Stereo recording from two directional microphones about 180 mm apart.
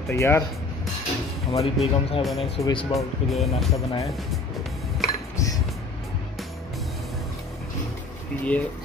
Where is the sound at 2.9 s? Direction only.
Centre (ahead or behind).